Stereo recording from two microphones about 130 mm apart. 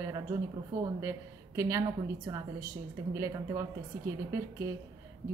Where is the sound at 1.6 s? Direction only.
20° right (ahead or behind).